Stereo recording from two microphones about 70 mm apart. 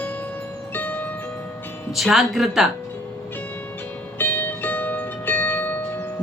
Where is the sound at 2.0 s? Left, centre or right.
Centre.